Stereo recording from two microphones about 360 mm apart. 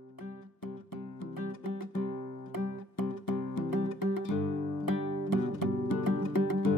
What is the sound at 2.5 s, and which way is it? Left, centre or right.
Music, left.